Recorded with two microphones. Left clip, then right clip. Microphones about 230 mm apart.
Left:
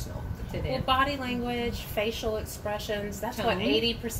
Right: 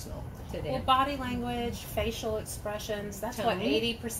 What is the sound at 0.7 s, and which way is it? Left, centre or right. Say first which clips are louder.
A woman's voice: even; centre.